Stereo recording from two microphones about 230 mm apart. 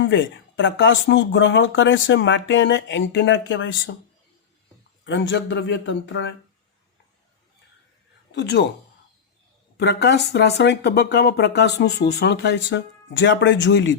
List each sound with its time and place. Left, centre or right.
0.0 s speech: left
5.0 s speech: left
8.3 s speech: left
9.7 s speech: left